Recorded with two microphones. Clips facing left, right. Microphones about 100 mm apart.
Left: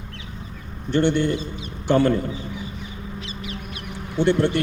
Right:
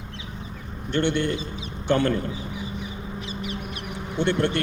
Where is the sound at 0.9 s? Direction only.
5° left (ahead or behind).